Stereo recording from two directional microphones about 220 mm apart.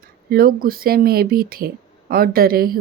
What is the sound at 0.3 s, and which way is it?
A woman's voice, 40° right (ahead or behind).